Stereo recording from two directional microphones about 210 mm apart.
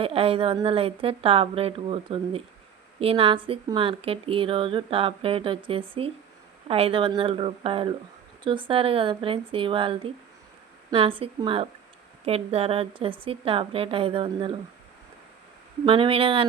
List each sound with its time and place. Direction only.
0.0 s speech: 25° right (ahead or behind)
15.9 s speech: 25° right (ahead or behind)